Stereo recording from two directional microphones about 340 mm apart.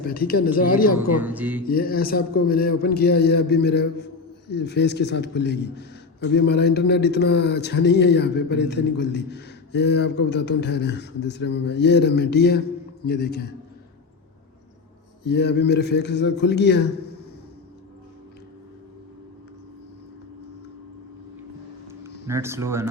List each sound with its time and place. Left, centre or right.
0.0 s a man's voice: left
1.2 s speech: centre
1.6 s a man's voice: left
15.2 s a man's voice: left
22.0 s speech: centre